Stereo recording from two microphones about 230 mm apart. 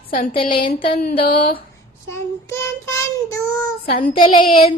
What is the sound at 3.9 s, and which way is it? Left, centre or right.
Child singing, left.